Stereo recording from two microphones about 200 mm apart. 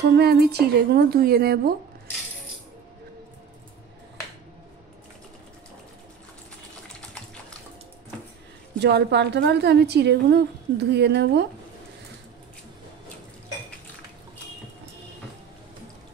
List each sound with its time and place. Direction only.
0.0 s speech: 50° right (ahead or behind)
8.7 s a woman's voice: 60° right (ahead or behind)